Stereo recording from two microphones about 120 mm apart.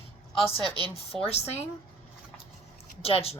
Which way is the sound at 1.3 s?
60° left (ahead or behind).